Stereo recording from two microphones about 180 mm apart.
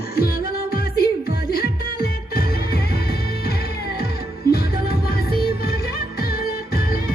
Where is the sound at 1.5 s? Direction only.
55° left (ahead or behind).